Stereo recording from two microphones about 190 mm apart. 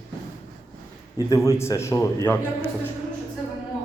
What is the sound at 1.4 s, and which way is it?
Speech, 15° left (ahead or behind).